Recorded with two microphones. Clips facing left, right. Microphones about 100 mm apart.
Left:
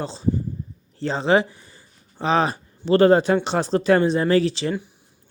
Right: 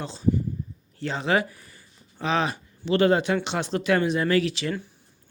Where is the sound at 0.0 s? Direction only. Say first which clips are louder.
Left 1 dB; 30° left (ahead or behind).